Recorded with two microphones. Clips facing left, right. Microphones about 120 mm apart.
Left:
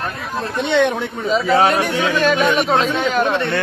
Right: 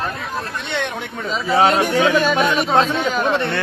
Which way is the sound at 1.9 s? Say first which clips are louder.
Right 3 dB; 40° right (ahead or behind).